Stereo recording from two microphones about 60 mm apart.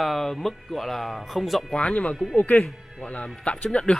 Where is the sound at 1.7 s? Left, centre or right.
Centre.